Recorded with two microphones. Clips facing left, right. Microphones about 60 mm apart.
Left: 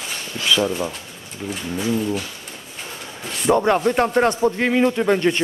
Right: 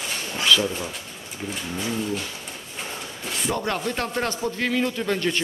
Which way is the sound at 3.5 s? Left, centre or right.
Left.